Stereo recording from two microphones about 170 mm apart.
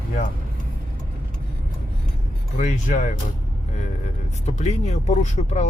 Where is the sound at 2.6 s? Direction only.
45° left (ahead or behind).